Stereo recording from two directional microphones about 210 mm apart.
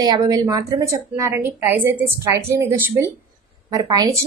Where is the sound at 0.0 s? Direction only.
20° right (ahead or behind).